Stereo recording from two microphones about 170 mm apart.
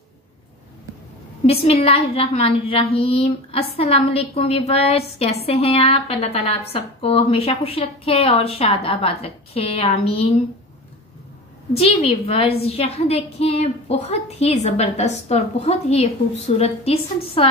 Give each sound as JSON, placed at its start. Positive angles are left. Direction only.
{"t": 1.4, "sound": "a woman's voice", "side_deg": 35}
{"t": 11.7, "sound": "a woman's voice", "side_deg": 35}